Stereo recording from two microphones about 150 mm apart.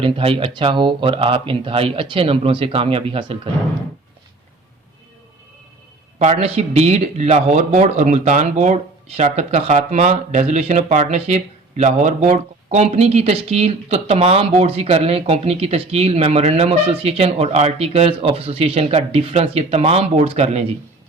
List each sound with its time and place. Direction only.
0.0 s speech: 35° right (ahead or behind)
6.1 s a man's voice: 45° right (ahead or behind)